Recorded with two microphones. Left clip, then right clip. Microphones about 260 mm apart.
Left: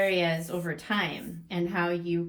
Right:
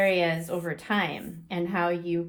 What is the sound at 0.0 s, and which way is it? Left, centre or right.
Speech, right.